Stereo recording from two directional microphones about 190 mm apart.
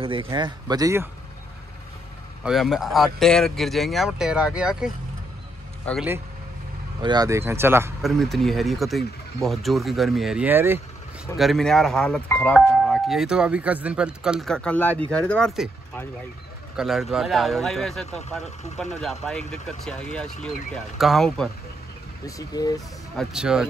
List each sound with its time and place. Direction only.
0.0 s speech: 30° right (ahead or behind)
2.4 s speech: centre (ahead or behind)
5.9 s speech: 5° left (ahead or behind)
7.0 s speech: 20° right (ahead or behind)
8.0 s speech: centre (ahead or behind)
11.3 s speech: centre (ahead or behind)
16.7 s speech: centre (ahead or behind)
22.2 s speech: 20° left (ahead or behind)
23.1 s speech: 5° right (ahead or behind)